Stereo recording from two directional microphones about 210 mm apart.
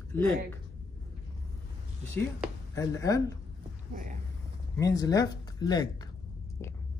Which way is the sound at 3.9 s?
40° right (ahead or behind).